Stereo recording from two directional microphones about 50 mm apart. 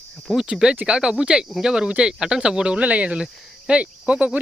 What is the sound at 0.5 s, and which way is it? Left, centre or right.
Speech, centre.